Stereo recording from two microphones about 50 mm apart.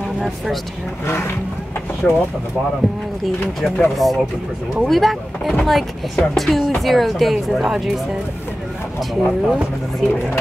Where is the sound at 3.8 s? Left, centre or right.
Centre.